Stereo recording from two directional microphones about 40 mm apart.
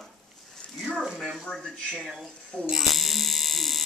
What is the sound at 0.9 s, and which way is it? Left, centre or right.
Speech, centre.